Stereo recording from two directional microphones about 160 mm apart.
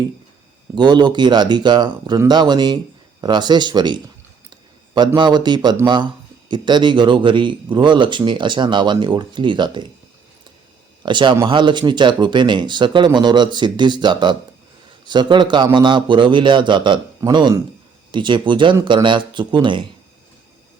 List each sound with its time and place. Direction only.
0.8 s speech: 25° right (ahead or behind)
4.9 s speech: 30° right (ahead or behind)
11.0 s speech: 30° right (ahead or behind)